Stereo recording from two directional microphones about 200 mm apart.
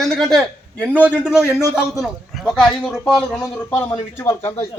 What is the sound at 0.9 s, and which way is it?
A man's voice, 5° right (ahead or behind).